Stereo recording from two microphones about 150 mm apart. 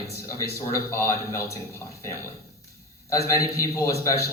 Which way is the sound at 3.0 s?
20° left (ahead or behind).